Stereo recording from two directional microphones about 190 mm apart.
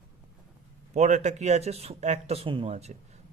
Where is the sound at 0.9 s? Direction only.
40° right (ahead or behind).